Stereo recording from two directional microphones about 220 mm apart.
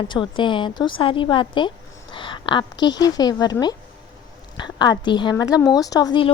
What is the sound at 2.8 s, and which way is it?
A woman's voice, 20° left (ahead or behind).